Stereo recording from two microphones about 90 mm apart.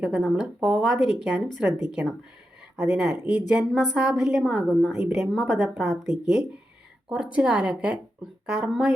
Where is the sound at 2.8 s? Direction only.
5° right (ahead or behind).